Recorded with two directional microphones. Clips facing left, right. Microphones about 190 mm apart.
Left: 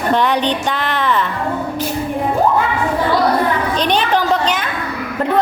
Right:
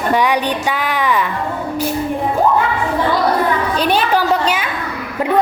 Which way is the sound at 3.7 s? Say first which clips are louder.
Right 1 dB; 5° right (ahead or behind).